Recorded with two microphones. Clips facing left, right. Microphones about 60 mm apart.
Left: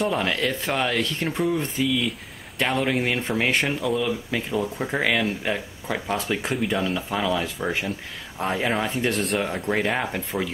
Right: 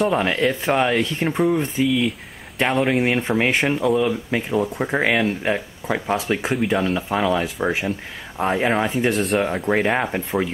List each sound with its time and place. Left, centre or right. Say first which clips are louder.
0.1 s speech: right 5 dB; centre
9.1 s speech: right 4 dB; centre
9.7 s speech: right 3 dB; centre